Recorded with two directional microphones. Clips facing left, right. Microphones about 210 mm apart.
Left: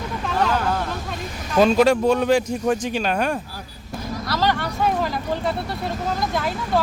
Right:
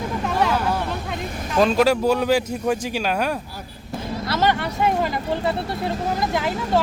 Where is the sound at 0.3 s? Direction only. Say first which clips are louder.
Even; 10° right (ahead or behind).